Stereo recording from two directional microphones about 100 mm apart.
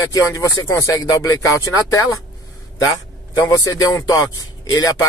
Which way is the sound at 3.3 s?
35° left (ahead or behind).